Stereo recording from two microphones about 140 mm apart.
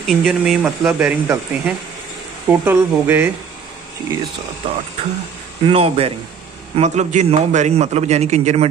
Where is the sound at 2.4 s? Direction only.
15° right (ahead or behind).